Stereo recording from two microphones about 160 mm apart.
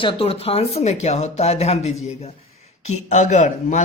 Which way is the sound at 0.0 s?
35° left (ahead or behind).